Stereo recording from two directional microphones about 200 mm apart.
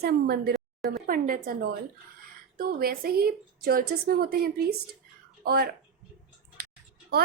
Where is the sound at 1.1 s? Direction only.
45° right (ahead or behind).